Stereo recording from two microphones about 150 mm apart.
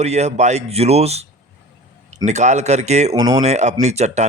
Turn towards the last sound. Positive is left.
turn(degrees=-50)  # may be behind; listen again after turning